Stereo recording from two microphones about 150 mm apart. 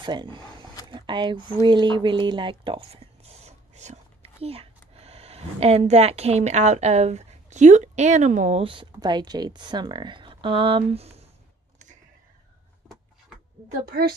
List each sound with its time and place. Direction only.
0.0 s speech: 30° right (ahead or behind); by 8.6 s 50° right (ahead or behind)
8.6 s speech: 30° right (ahead or behind)
13.8 s a woman's voice: 90° right